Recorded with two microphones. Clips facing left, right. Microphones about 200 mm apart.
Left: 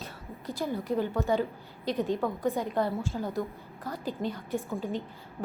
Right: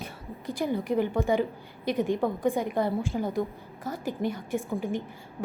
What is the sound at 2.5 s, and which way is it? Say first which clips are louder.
A woman's voice: right 2 dB; 15° right (ahead or behind).